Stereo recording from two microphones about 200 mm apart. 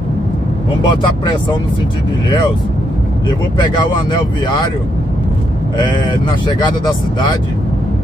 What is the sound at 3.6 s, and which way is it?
Speech, 20° left (ahead or behind).